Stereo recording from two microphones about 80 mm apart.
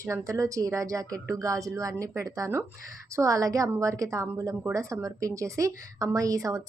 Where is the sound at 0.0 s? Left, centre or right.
Right.